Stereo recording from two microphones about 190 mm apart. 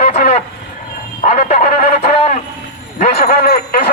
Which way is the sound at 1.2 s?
40° left (ahead or behind).